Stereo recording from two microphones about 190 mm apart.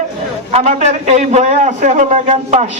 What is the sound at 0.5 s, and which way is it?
A man's voice, 35° right (ahead or behind).